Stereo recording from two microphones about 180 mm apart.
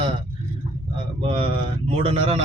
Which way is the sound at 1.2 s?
30° right (ahead or behind).